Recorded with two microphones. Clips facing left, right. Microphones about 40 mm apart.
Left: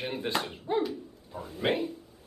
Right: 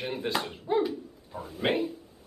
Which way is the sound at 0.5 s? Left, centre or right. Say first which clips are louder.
Right 2 dB; centre.